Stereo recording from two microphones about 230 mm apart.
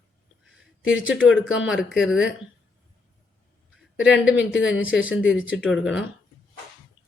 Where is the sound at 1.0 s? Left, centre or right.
Centre.